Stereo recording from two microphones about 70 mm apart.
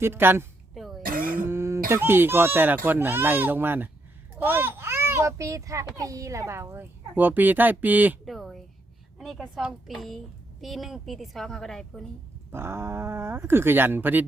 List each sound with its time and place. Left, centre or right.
0.0 s speech: right
0.7 s a sound: centre
1.5 s speech: right
4.4 s baby cry: right
5.4 s speech: right
7.2 s speech: right
8.2 s a woman's voice: centre
12.5 s speech: right